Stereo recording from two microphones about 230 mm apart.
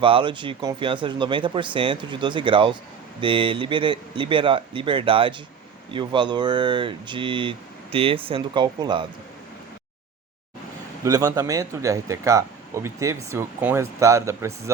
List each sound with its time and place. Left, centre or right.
0.0 s speech: right
11.0 s speech: centre